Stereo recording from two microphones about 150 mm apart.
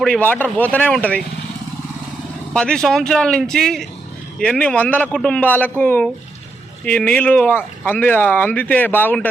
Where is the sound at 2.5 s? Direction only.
5° left (ahead or behind).